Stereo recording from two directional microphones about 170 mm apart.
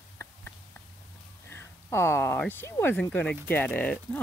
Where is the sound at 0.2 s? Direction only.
15° left (ahead or behind).